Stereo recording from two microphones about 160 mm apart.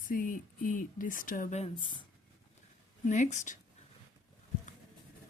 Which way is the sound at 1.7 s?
30° left (ahead or behind).